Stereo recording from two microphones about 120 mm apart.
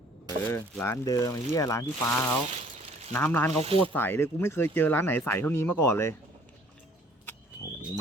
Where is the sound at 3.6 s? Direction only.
55° right (ahead or behind).